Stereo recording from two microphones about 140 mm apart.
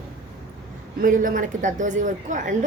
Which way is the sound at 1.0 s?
75° right (ahead or behind).